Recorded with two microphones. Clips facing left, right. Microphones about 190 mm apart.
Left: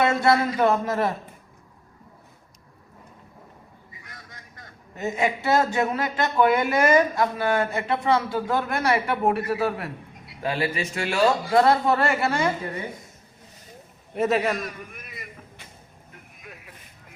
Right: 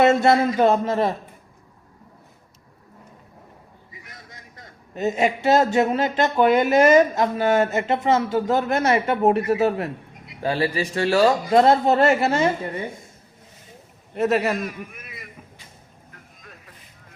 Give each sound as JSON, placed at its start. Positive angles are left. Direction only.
{"t": 0.0, "sound": "a man's voice", "side_deg": -25}
{"t": 4.0, "sound": "a man's voice", "side_deg": -20}
{"t": 11.4, "sound": "a man's voice", "side_deg": -25}
{"t": 14.1, "sound": "a man's voice", "side_deg": 0}
{"t": 16.1, "sound": "vehicle", "side_deg": 10}